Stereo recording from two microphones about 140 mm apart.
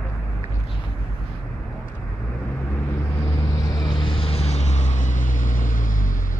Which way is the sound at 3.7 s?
30° left (ahead or behind).